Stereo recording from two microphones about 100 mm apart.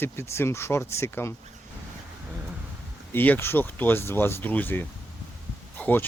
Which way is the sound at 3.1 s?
20° left (ahead or behind).